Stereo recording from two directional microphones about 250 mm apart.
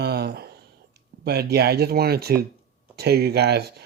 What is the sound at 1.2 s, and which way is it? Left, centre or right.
Speech, right.